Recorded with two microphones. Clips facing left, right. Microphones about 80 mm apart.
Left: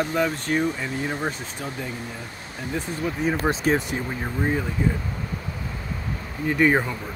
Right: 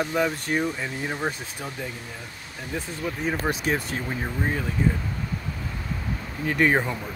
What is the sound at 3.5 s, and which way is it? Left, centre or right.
Speech, left.